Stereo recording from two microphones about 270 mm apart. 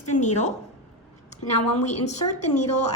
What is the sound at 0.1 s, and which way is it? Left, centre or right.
Speech, left.